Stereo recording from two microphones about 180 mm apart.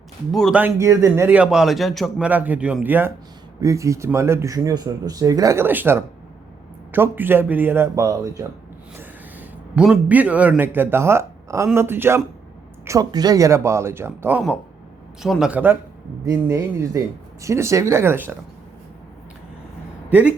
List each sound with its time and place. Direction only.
0.3 s speech: centre (ahead or behind)
0.6 s a man's voice: 15° right (ahead or behind)
9.0 s a man's voice: 5° right (ahead or behind)
20.1 s speech: 10° right (ahead or behind)